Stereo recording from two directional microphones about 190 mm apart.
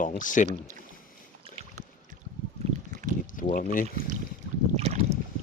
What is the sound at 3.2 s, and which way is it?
Speech, 45° left (ahead or behind).